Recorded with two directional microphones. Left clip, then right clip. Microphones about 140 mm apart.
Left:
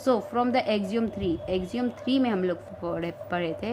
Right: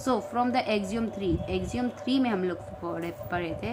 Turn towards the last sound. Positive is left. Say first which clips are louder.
# left 2 dB
turn(degrees=45)  # may be behind; listen again after turning